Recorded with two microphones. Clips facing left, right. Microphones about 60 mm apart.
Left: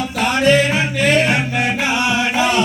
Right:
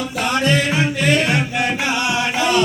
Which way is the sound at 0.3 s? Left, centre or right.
Left.